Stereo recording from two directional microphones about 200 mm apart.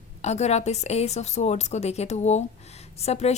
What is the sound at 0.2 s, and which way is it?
Speech, 35° left (ahead or behind).